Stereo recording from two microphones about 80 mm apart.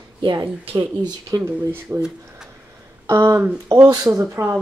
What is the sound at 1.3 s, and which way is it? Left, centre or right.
Speech, right.